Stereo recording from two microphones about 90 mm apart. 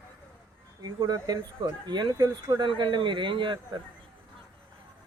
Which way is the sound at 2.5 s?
60° right (ahead or behind).